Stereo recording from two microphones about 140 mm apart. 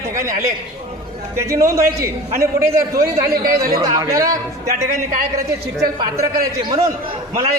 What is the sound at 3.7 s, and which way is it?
Speech, 25° right (ahead or behind).